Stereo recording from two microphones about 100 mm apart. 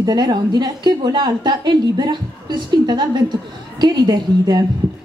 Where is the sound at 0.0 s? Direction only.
45° right (ahead or behind).